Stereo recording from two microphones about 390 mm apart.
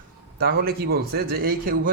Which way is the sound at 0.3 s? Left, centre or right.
Right.